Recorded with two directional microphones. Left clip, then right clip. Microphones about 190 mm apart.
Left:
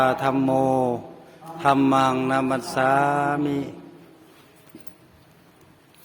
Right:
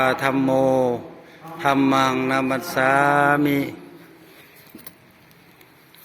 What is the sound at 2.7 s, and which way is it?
Mantra, 15° left (ahead or behind).